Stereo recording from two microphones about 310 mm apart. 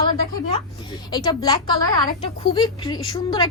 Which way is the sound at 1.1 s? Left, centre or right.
Centre.